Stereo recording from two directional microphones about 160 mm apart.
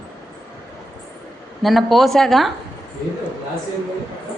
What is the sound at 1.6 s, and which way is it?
Speech, centre (ahead or behind).